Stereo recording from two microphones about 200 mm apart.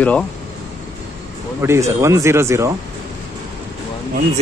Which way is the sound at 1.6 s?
15° right (ahead or behind).